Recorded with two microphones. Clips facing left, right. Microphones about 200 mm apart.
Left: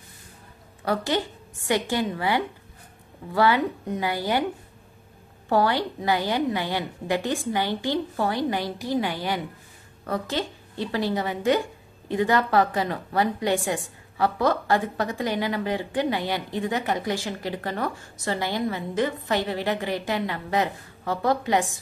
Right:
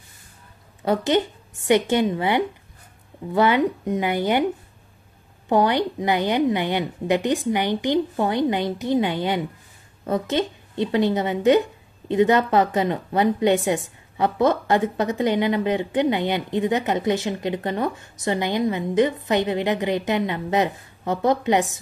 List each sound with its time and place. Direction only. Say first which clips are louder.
0.8 s a woman's voice: right 5 dB; 20° right (ahead or behind)
5.5 s a woman's voice: right 3 dB; 20° right (ahead or behind)